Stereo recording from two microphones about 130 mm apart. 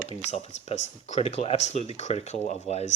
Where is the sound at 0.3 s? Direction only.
55° left (ahead or behind).